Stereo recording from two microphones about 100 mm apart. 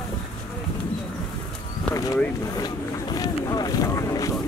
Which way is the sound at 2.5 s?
40° left (ahead or behind).